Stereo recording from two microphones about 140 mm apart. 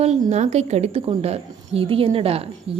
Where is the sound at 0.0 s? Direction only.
50° right (ahead or behind).